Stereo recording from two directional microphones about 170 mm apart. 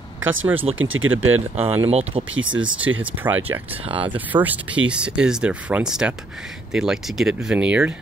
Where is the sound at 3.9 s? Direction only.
30° right (ahead or behind).